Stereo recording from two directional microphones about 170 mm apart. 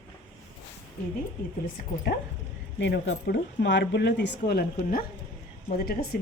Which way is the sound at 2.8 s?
90° left.